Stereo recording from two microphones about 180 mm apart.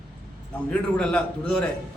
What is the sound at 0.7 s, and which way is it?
Speech, 5° left (ahead or behind).